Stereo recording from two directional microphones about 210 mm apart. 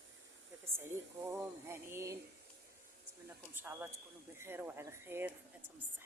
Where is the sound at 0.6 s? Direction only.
10° right (ahead or behind).